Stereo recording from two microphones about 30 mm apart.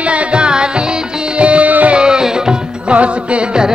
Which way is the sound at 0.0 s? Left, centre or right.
Right.